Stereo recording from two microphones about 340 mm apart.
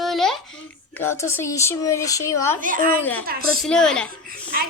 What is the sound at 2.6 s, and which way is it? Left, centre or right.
Speech, right.